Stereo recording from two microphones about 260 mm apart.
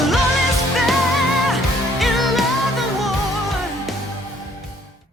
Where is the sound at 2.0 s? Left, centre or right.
Centre.